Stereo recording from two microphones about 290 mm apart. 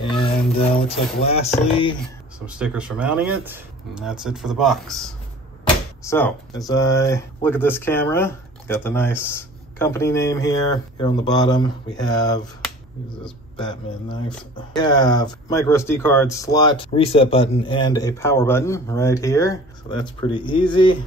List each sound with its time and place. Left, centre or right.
0.8 s speech: left
2.4 s speech: centre
13.6 s speech: centre